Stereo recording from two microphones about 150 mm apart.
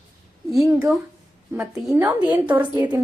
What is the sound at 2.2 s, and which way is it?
Speech, 10° right (ahead or behind).